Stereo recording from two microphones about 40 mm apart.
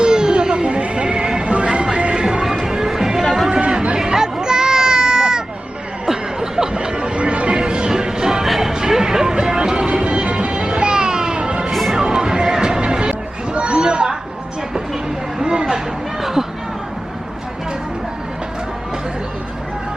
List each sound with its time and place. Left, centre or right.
0.0 s music: centre
2.4 s music: centre
3.5 s a sound: right
6.1 s music: centre
8.4 s music: centre
8.7 s music: centre
11.7 s music: centre
11.9 s music: centre
15.4 s a sound: right
16.2 s a sound: centre